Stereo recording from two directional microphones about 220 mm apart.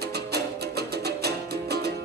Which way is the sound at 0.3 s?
45° right (ahead or behind).